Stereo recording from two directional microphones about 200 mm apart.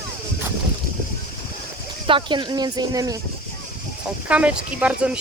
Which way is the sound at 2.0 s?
25° right (ahead or behind).